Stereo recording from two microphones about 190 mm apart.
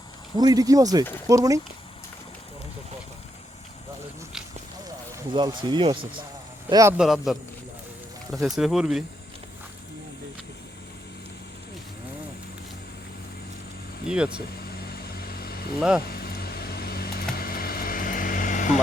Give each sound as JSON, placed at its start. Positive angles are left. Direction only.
{"t": 0.3, "sound": "speech", "side_deg": -20}
{"t": 5.3, "sound": "speech", "side_deg": -20}
{"t": 6.9, "sound": "speech", "side_deg": 0}
{"t": 14.1, "sound": "speech", "side_deg": -5}
{"t": 14.5, "sound": "vehicle", "side_deg": 55}
{"t": 16.0, "sound": "a sound", "side_deg": 55}
{"t": 17.3, "sound": "vehicle", "side_deg": 50}